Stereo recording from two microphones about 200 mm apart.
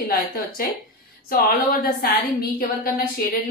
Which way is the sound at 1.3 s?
45° left (ahead or behind).